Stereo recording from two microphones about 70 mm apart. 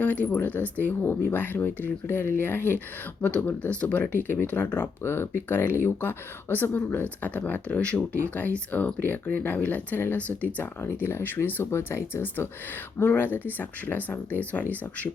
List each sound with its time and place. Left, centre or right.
0.0 s speech: left
10.6 s speech: left